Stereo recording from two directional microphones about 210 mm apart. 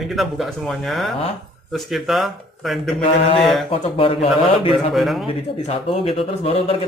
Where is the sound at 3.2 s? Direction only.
25° left (ahead or behind).